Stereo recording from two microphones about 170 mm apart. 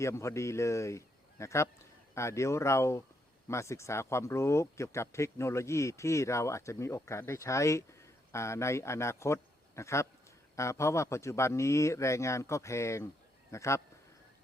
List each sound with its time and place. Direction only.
0.0 s speech: 15° left (ahead or behind)